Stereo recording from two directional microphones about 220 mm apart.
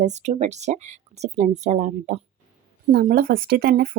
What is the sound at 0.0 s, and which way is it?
Speech, 30° right (ahead or behind).